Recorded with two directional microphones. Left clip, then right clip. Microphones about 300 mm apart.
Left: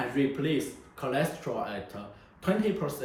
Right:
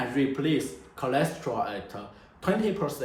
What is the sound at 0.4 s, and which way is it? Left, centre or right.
Speech, centre.